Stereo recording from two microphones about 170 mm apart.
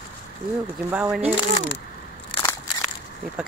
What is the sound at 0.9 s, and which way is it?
Speech, 5° right (ahead or behind).